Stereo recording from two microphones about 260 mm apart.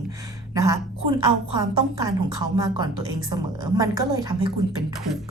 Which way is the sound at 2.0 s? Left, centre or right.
Centre.